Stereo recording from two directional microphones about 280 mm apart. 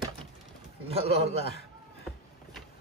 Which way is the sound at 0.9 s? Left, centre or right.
Right.